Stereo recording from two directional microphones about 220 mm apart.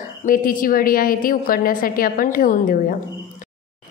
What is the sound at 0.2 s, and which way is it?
A woman's voice, 40° left (ahead or behind).